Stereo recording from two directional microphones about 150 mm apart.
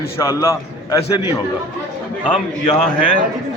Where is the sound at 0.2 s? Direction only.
20° left (ahead or behind).